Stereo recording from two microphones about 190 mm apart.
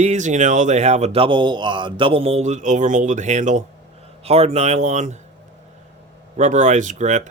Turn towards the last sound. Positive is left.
turn(degrees=-40)  # may be behind; listen again after turning